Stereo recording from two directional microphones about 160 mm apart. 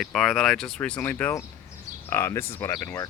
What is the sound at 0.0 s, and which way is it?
Speech, 5° left (ahead or behind).